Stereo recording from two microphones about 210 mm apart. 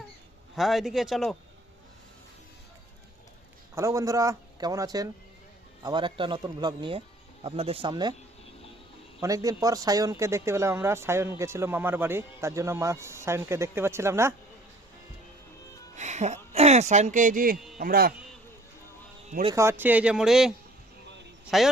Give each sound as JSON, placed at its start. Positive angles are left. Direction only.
{"t": 0.5, "sound": "speech", "side_deg": 0}
{"t": 3.8, "sound": "speech", "side_deg": -15}
{"t": 9.2, "sound": "speech", "side_deg": -15}
{"t": 16.0, "sound": "a man's voice", "side_deg": -35}
{"t": 19.3, "sound": "speech", "side_deg": -30}
{"t": 19.5, "sound": "speech", "side_deg": -10}
{"t": 21.5, "sound": "speech", "side_deg": 0}